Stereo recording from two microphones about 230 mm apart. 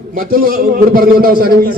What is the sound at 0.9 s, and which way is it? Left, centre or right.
Speech, right.